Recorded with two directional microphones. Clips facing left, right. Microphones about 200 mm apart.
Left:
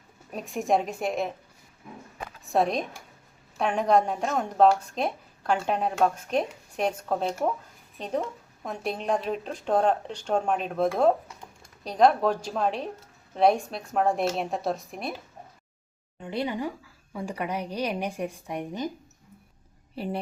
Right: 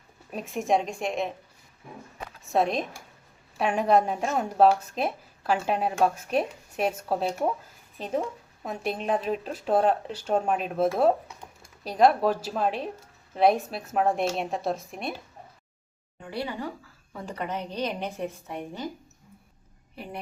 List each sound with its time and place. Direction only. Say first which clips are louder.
0.3 s a woman's voice: even; centre (ahead or behind)
2.4 s a woman's voice: even; centre (ahead or behind)
16.2 s speech: left 3 dB; 20° left (ahead or behind)
20.0 s a woman's voice: left 8 dB; 30° left (ahead or behind)